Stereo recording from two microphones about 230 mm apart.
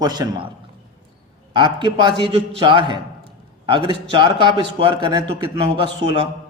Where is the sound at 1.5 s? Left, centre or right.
Right.